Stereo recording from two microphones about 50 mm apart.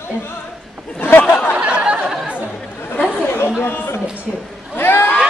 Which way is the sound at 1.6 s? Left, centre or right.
Right.